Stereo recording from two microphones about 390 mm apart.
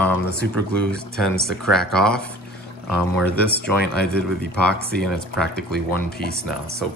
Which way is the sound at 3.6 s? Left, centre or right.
Left.